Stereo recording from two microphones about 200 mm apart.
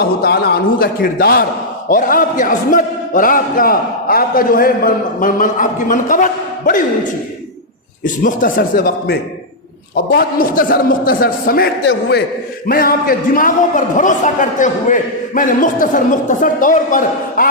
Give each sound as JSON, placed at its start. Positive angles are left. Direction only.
{"t": 0.0, "sound": "a man's voice", "side_deg": 50}
{"t": 8.0, "sound": "a man's voice", "side_deg": 40}